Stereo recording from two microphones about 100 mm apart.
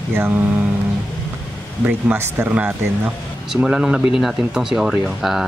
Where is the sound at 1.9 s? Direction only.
20° right (ahead or behind).